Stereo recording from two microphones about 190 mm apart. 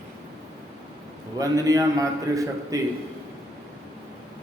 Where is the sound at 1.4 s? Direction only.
20° right (ahead or behind).